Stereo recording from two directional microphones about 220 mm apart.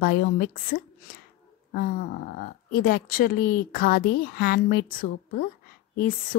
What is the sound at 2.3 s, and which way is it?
Speech, 40° left (ahead or behind).